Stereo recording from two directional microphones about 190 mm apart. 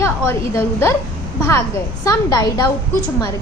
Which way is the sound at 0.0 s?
15° left (ahead or behind).